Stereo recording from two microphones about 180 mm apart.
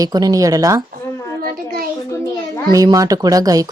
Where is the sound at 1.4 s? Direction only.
55° right (ahead or behind).